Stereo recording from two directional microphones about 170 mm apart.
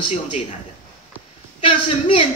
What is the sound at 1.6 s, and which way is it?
Speech, 30° left (ahead or behind).